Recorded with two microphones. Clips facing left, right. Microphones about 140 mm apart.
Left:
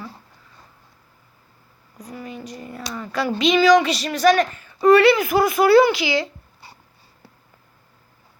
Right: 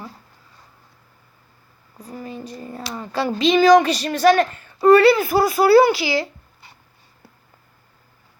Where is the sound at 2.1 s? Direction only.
35° right (ahead or behind).